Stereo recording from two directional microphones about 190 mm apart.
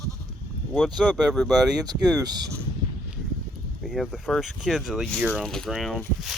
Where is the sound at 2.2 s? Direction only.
20° right (ahead or behind).